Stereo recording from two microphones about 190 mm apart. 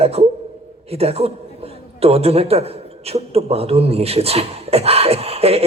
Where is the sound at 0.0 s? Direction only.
30° right (ahead or behind).